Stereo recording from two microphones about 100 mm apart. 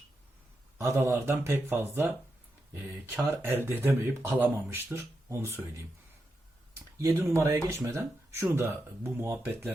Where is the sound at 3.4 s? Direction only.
20° right (ahead or behind).